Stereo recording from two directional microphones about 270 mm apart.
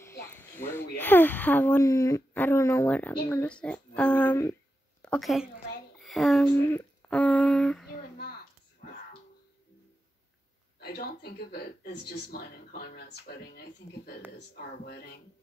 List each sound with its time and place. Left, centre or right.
0.0 s a sound: centre
0.9 s a woman's voice: centre
10.8 s speech: left